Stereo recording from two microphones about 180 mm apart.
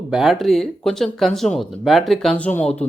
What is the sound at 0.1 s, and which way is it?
Speech, centre (ahead or behind).